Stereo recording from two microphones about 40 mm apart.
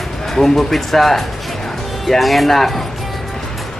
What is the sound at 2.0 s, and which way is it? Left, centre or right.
Speech, centre.